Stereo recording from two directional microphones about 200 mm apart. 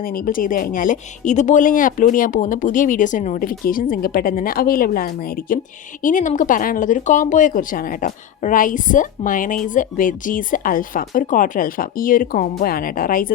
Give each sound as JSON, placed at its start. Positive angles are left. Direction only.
{"t": 0.0, "sound": "speech", "side_deg": 45}